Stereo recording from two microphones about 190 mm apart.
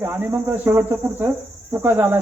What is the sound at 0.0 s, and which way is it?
Speech, 10° right (ahead or behind).